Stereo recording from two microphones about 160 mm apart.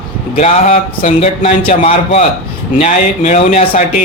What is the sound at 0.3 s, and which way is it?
Speech, 45° left (ahead or behind).